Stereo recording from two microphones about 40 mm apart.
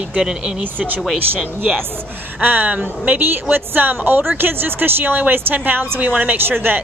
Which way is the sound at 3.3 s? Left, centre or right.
Right.